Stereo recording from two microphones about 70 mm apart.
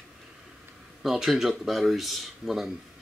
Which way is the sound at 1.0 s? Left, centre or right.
Centre.